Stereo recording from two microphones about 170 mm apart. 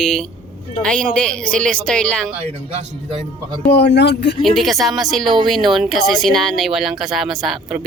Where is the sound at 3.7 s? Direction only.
75° left (ahead or behind).